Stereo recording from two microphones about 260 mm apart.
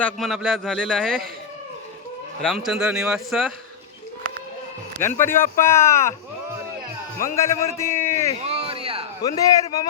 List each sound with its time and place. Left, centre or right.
0.0 s a man's voice: centre
2.4 s a man's voice: centre
4.9 s speech: centre
7.3 s speech: centre
8.4 s a sound: right
9.2 s speech: centre